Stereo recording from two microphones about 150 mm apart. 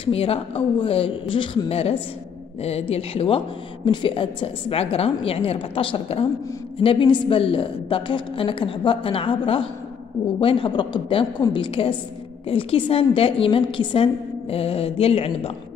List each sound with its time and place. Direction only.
0.0 s speech: 40° left (ahead or behind)